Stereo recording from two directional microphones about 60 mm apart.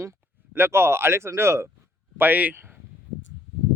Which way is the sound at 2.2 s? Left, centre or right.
Right.